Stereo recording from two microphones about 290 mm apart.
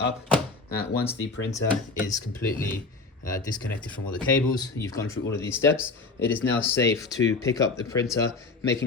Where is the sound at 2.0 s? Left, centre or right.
Centre.